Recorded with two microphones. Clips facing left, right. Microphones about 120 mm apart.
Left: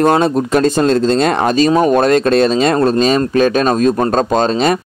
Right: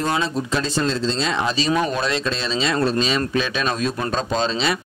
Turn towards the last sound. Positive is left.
turn(degrees=50)  # may be behind; listen again after turning